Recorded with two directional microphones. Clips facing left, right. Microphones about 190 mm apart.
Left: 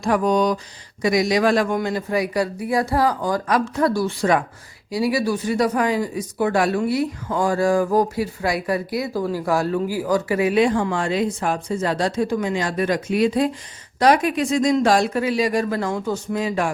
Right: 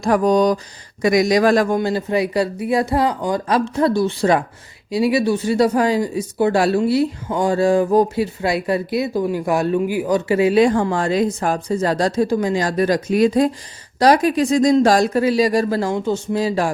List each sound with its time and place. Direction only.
0.0 s speech: 40° right (ahead or behind)
1.7 s speech: 30° right (ahead or behind)